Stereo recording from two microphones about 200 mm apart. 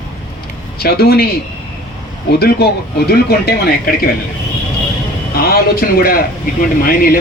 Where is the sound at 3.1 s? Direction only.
55° left (ahead or behind).